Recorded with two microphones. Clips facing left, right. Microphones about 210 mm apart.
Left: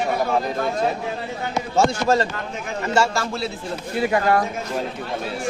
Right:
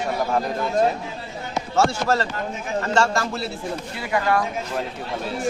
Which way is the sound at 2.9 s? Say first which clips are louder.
Left 1 dB; 5° left (ahead or behind).